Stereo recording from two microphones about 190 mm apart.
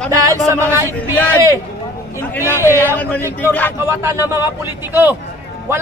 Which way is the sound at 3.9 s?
15° right (ahead or behind).